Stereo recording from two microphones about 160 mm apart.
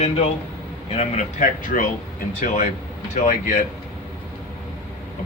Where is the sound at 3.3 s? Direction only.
55° left (ahead or behind).